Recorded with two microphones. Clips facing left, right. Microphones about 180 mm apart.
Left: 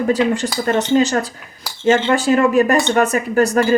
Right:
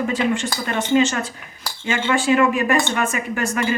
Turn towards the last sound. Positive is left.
turn(degrees=40)  # may be behind; listen again after turning